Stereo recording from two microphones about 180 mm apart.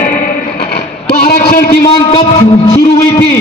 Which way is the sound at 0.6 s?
65° left (ahead or behind).